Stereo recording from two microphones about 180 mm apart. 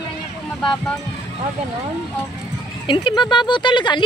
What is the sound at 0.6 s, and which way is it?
Speech, 5° left (ahead or behind).